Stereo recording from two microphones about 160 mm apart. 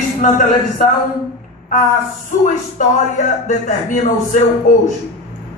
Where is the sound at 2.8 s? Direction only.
55° left (ahead or behind).